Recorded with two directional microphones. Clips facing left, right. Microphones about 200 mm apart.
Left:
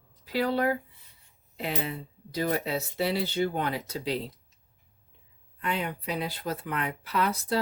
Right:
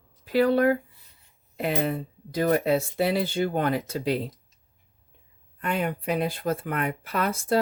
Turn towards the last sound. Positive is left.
turn(degrees=-50)  # may be behind; listen again after turning